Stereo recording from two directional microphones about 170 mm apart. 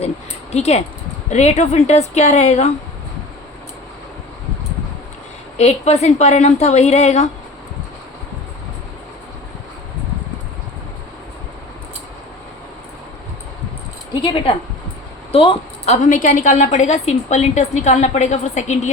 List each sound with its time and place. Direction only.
0.5 s a woman's voice: 40° left (ahead or behind)
5.5 s a woman's voice: 40° left (ahead or behind)
14.1 s a woman's voice: 30° left (ahead or behind)
16.0 s a woman's voice: 50° left (ahead or behind)